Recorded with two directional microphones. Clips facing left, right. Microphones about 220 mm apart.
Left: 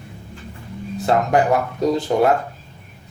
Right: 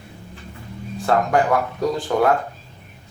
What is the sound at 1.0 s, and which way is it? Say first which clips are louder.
Speech: left 1 dB; 20° left (ahead or behind).